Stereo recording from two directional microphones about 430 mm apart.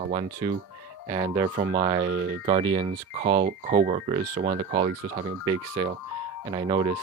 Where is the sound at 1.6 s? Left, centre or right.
Right.